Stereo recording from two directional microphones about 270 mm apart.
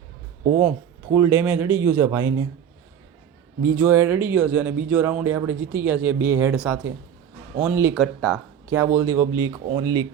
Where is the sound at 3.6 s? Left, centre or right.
Centre.